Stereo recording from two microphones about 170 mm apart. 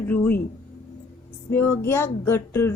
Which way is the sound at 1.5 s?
10° left (ahead or behind).